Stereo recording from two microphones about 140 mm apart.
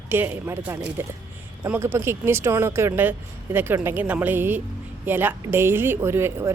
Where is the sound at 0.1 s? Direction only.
15° right (ahead or behind).